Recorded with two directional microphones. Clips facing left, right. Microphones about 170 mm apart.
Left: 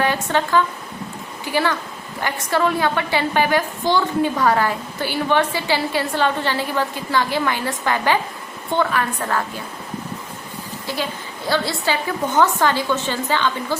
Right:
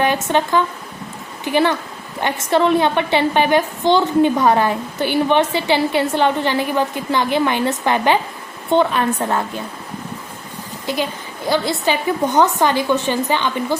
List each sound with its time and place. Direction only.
0.0 s a woman's voice: 20° right (ahead or behind)
10.9 s a woman's voice: 20° right (ahead or behind)